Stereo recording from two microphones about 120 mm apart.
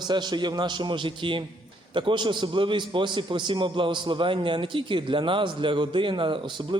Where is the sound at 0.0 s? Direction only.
35° right (ahead or behind).